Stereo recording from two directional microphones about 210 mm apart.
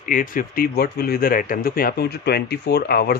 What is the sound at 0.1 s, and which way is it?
Speech, 40° left (ahead or behind).